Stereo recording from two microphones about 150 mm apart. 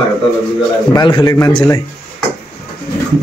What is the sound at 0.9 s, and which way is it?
Speech, 30° left (ahead or behind).